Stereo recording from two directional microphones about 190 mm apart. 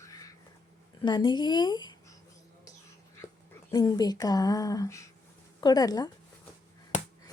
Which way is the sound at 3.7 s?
20° left (ahead or behind).